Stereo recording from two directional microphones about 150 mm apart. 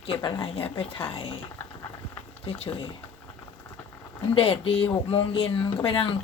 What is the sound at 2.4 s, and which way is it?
Speech, 40° left (ahead or behind).